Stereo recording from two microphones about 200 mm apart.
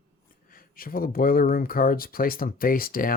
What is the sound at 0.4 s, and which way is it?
Speech, 45° left (ahead or behind).